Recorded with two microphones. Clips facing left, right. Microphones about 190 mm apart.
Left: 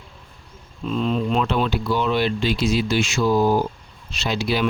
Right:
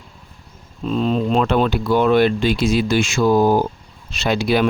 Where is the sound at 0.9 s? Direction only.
35° right (ahead or behind).